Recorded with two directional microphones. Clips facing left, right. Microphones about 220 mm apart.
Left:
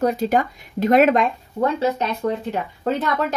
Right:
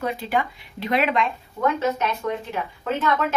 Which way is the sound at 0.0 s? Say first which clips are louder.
Left 6 dB; 45° left (ahead or behind).